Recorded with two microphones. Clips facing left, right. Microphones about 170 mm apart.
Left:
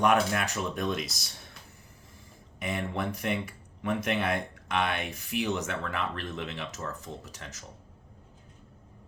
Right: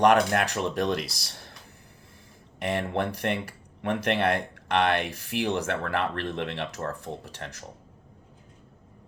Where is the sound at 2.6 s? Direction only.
70° right (ahead or behind).